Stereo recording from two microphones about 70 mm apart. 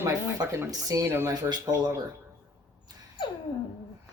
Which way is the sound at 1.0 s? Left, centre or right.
Right.